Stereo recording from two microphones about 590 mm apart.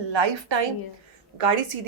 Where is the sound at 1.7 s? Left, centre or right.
Right.